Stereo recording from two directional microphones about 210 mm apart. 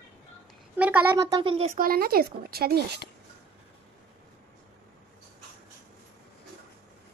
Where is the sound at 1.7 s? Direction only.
45° right (ahead or behind).